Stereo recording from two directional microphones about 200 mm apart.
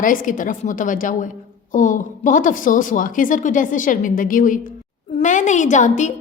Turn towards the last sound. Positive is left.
turn(degrees=40)  # may be behind; listen again after turning